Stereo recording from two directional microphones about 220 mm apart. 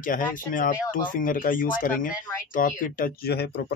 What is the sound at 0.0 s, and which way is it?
Speech, 40° left (ahead or behind).